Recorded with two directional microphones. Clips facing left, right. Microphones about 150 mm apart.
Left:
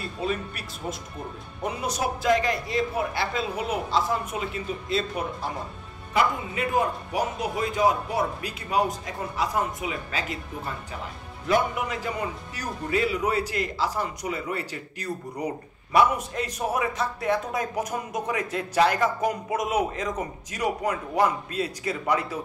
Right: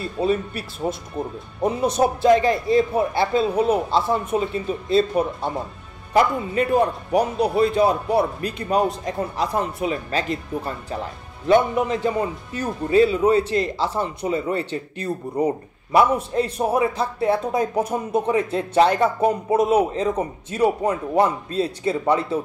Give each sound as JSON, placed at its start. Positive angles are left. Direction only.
{"t": 0.2, "sound": "a man's voice", "side_deg": -30}
{"t": 8.4, "sound": "speech", "side_deg": 5}
{"t": 8.6, "sound": "a man's voice", "side_deg": -35}
{"t": 11.4, "sound": "a man's voice", "side_deg": -30}